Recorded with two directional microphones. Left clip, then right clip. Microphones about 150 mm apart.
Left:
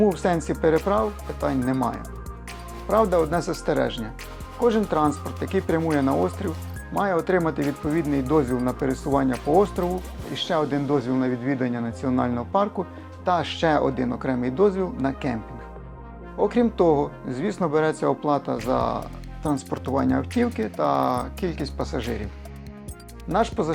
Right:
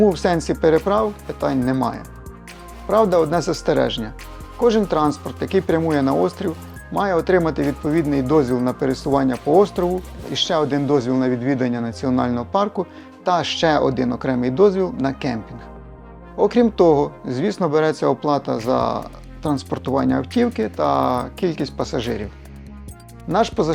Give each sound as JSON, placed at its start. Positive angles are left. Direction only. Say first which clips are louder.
{"t": 0.0, "sound": "a man's voice", "louder": "right 4 dB", "side_deg": -40}
{"t": 16.4, "sound": "speech", "louder": "right 5 dB", "side_deg": -40}
{"t": 20.4, "sound": "a man's voice", "louder": "right 5 dB", "side_deg": -45}
{"t": 23.3, "sound": "speech", "louder": "right 5 dB", "side_deg": -40}